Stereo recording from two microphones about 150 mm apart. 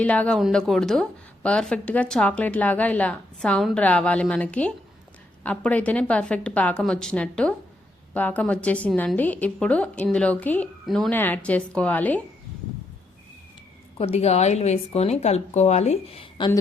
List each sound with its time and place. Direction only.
0.0 s a woman's voice: 10° left (ahead or behind)
11.1 s a woman's voice: 10° left (ahead or behind)
14.0 s a woman's voice: 45° left (ahead or behind)